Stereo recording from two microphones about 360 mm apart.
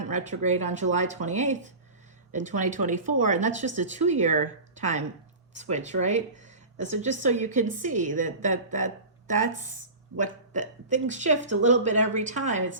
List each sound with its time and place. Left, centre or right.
0.0 s speech: centre